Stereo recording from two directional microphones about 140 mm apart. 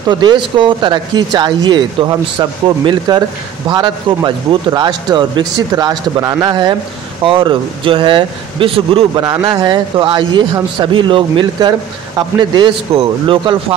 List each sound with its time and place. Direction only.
0.2 s speech: 35° right (ahead or behind)
9.1 s speech: 30° right (ahead or behind)